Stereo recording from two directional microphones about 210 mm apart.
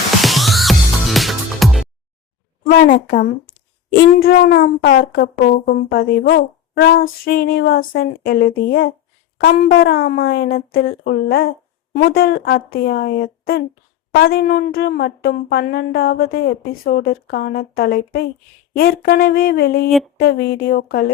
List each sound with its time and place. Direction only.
0.2 s music: centre (ahead or behind)
2.6 s a woman's voice: 40° left (ahead or behind)